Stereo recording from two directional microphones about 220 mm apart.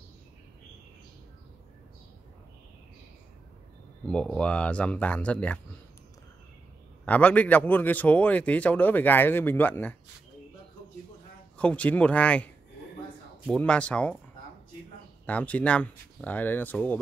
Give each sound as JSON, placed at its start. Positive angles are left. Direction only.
{"t": 4.0, "sound": "speech", "side_deg": 5}
{"t": 7.1, "sound": "a man's voice", "side_deg": 5}
{"t": 11.5, "sound": "speech", "side_deg": 5}
{"t": 13.5, "sound": "speech", "side_deg": 5}
{"t": 15.2, "sound": "a man's voice", "side_deg": 5}